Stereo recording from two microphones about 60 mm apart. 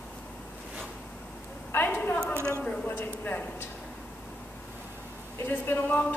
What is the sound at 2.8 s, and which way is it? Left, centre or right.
Speech, left.